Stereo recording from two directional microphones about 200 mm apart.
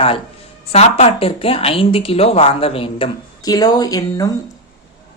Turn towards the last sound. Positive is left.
turn(degrees=20)  # may be behind; listen again after turning